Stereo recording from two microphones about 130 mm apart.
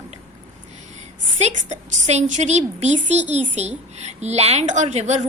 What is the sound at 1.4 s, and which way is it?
A woman's voice, 60° right (ahead or behind).